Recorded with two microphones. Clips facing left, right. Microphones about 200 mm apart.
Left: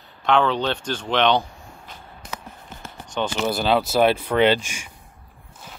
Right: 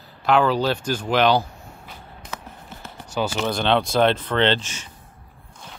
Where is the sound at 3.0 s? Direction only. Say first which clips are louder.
Right 1 dB; 5° right (ahead or behind).